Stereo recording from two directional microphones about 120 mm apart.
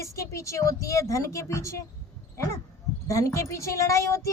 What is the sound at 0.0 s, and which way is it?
Speech, 25° left (ahead or behind).